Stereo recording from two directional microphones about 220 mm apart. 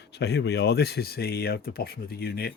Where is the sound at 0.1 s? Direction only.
50° left (ahead or behind).